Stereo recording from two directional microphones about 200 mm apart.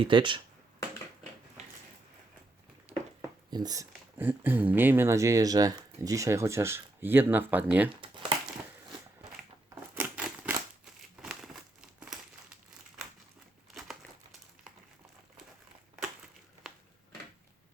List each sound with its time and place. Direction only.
0.0 s speech: 25° right (ahead or behind)
2.9 s a sound: 35° right (ahead or behind)
3.5 s speech: 20° right (ahead or behind)
8.0 s crumpling: 25° right (ahead or behind)
9.9 s scissors: 10° right (ahead or behind)
11.2 s crumpling: centre (ahead or behind)